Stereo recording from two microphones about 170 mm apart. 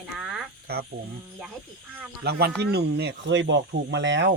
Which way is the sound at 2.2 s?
70° right (ahead or behind).